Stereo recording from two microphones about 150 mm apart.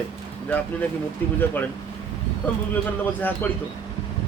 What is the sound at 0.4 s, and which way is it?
Speech, 10° left (ahead or behind).